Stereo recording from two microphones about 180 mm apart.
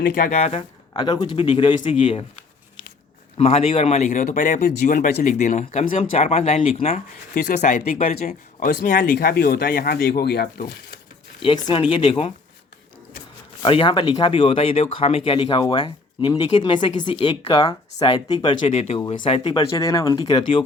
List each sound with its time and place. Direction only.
0.0 s speech: 45° left (ahead or behind)
0.9 s speech: 25° left (ahead or behind)
3.3 s speech: 35° left (ahead or behind); by 10.7 s 60° left (ahead or behind)
11.3 s speech: 25° left (ahead or behind)
13.6 s speech: 25° left (ahead or behind)
18.7 s speech: 40° left (ahead or behind)
19.2 s speech: 25° left (ahead or behind)